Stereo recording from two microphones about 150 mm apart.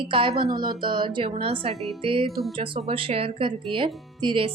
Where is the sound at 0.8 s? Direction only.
35° right (ahead or behind).